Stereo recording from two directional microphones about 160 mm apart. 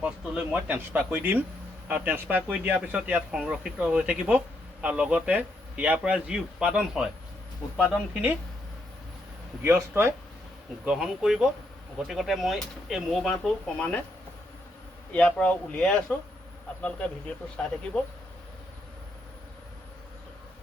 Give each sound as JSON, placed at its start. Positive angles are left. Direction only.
{"t": 0.0, "sound": "speech", "side_deg": -10}
{"t": 9.6, "sound": "speech", "side_deg": -15}
{"t": 10.8, "sound": "speech", "side_deg": -5}
{"t": 15.1, "sound": "speech", "side_deg": 10}